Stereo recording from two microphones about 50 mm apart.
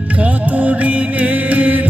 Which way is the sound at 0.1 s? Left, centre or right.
Right.